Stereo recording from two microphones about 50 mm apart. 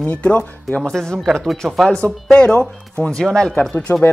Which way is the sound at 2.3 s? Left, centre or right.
Centre.